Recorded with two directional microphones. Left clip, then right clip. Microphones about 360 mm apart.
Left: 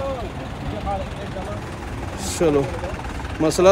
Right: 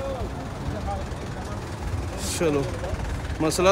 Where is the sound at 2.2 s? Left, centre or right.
Centre.